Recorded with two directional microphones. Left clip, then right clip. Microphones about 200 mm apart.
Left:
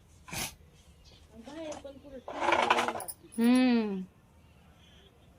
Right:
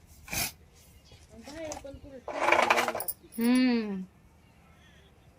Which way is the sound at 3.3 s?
15° left (ahead or behind).